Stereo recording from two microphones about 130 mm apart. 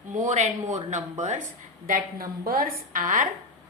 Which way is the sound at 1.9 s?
90° right.